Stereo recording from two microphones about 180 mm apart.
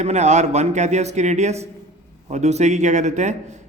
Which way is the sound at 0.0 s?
40° right (ahead or behind).